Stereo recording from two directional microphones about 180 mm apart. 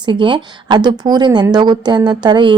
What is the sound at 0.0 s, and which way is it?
A woman's voice, 25° right (ahead or behind).